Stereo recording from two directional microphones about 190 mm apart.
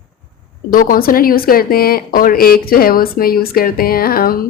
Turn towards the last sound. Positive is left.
turn(degrees=50)  # may be behind; listen again after turning